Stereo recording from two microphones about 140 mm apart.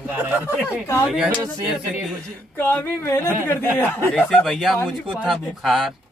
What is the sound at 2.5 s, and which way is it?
Speech, 15° left (ahead or behind).